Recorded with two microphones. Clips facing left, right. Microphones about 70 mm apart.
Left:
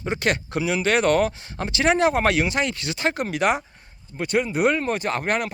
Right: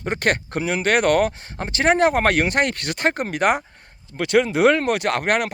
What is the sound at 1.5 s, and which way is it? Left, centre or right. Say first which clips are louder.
Speech: right 2 dB; right.